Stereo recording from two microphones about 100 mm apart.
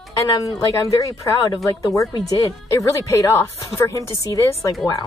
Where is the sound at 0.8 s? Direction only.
35° left (ahead or behind).